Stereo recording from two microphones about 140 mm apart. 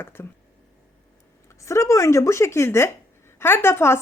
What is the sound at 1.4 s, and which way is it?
Speech, 20° left (ahead or behind).